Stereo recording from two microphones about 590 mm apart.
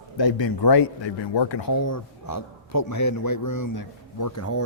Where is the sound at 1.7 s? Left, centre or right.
Left.